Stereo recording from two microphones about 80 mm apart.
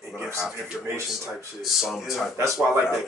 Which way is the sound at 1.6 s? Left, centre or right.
Centre.